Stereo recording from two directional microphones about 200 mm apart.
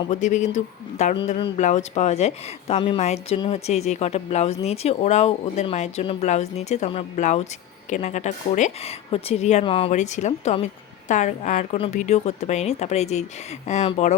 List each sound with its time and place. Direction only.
0.1 s a woman's voice: 35° left (ahead or behind)